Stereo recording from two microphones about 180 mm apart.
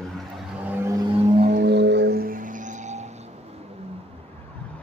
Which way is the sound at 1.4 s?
60° right (ahead or behind).